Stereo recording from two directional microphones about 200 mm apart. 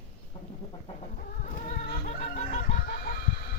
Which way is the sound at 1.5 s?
35° left (ahead or behind).